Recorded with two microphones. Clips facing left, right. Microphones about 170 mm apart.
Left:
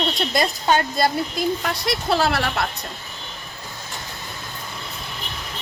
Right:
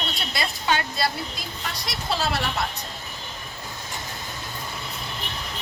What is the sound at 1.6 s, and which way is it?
Speech, 60° left (ahead or behind).